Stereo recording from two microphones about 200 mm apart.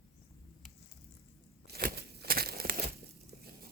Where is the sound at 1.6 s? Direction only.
50° right (ahead or behind).